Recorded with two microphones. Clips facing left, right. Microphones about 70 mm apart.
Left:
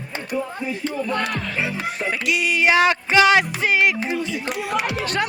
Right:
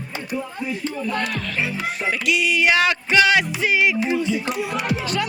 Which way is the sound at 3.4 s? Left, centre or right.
Left.